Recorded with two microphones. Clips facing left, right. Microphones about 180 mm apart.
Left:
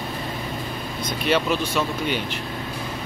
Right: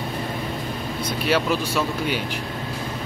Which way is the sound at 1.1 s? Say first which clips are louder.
Even; 5° right (ahead or behind).